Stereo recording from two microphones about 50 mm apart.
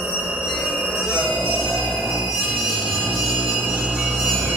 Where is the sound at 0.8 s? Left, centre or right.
Right.